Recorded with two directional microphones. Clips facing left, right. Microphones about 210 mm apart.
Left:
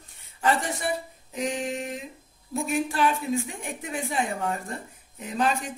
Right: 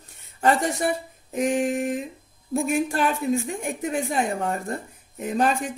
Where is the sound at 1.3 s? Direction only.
50° right (ahead or behind).